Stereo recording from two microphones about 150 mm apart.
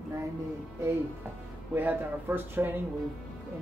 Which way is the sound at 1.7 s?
10° right (ahead or behind).